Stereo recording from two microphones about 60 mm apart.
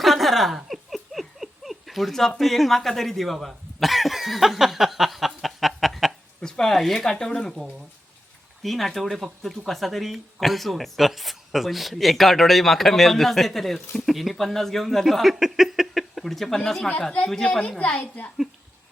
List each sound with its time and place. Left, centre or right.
0.0 s a sound: centre
2.4 s cough: centre
6.4 s speech: centre
8.6 s speech: centre